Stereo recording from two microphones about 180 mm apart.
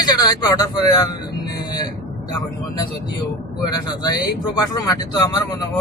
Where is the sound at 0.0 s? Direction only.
25° left (ahead or behind).